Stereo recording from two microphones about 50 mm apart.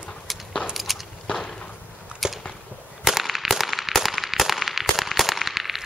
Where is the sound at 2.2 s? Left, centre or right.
Centre.